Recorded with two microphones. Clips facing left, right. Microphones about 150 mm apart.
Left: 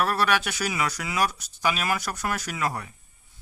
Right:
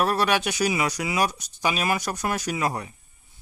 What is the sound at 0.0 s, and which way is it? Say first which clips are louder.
Speech: right 2 dB; 20° right (ahead or behind).